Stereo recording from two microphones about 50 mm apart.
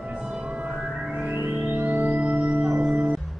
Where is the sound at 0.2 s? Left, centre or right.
Centre.